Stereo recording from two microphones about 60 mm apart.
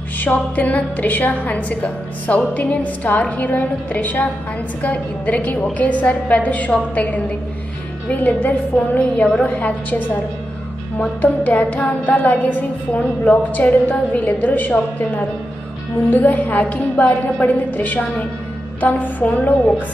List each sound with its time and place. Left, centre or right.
0.2 s a woman's voice: left
8.1 s a woman's voice: left